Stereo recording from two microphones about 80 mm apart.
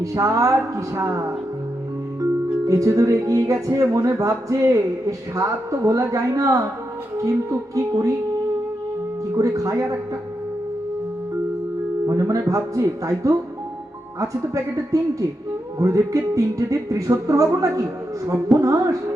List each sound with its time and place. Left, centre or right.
0.0 s speech: right
9.3 s speech: right
12.0 s speech: right